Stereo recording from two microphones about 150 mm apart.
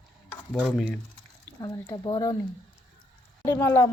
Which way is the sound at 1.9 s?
25° left (ahead or behind).